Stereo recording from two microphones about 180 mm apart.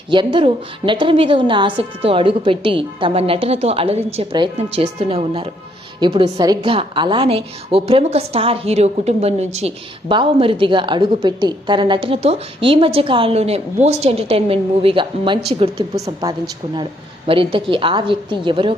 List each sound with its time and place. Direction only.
0.1 s a woman's voice: 25° right (ahead or behind)
17.2 s a woman's voice: 30° right (ahead or behind)